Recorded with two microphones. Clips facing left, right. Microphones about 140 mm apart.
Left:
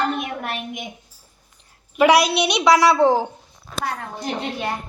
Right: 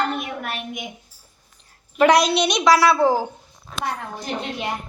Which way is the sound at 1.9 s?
10° left (ahead or behind).